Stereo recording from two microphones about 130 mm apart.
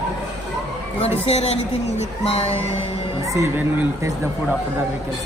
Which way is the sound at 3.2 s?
25° right (ahead or behind).